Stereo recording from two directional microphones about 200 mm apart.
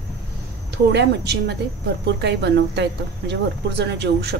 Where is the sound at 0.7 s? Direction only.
55° right (ahead or behind).